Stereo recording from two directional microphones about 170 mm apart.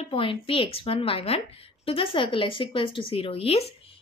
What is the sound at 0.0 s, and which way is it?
A woman's voice, 30° left (ahead or behind).